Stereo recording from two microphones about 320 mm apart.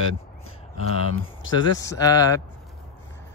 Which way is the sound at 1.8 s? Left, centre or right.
Centre.